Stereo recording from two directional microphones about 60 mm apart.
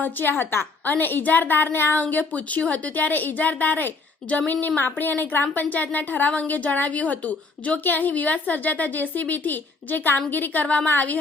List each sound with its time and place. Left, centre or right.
0.0 s a woman's voice: left
2.0 s a woman's voice: left